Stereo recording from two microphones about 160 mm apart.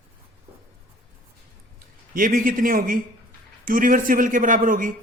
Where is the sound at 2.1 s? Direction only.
60° right (ahead or behind).